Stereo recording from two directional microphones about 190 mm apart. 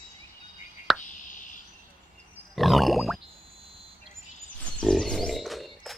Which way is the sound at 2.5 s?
Centre (ahead or behind).